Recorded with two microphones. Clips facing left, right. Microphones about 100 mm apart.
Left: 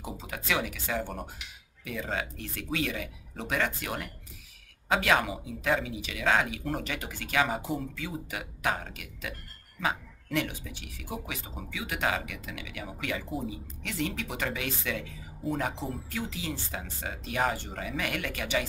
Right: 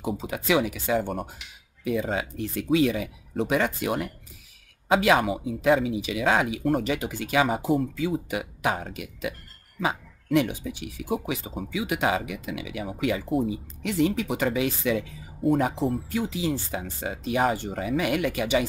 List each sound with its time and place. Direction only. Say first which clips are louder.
0.2 s speech: right 7 dB; 15° right (ahead or behind)